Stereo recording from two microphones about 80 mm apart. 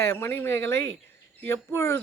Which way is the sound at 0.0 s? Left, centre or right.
Left.